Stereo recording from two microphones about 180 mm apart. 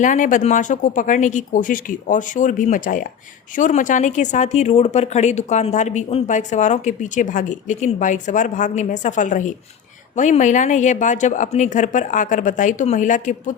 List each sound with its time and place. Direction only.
0.0 s a woman's voice: 45° left (ahead or behind)